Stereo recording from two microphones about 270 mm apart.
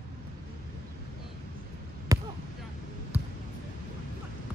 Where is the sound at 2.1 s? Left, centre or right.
Centre.